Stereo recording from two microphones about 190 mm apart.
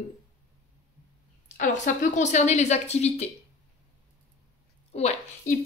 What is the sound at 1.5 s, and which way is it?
Speech, 40° left (ahead or behind).